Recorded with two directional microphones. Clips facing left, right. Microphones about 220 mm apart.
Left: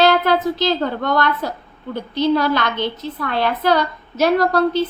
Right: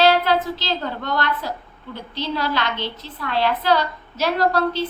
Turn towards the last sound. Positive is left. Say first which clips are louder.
# left 4 dB
turn(degrees=45)  # may be behind; listen again after turning